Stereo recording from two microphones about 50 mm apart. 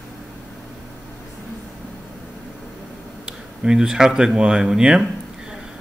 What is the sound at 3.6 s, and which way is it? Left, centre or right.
Speech, centre.